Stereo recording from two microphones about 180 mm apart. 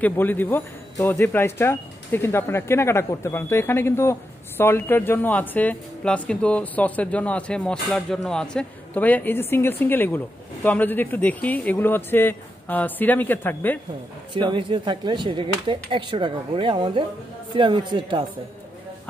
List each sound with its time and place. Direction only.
0.0 s speech: 10° left (ahead or behind)
14.5 s speech: 25° right (ahead or behind)